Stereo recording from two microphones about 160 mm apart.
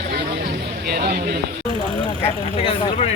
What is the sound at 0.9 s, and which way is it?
Speech, 80° right.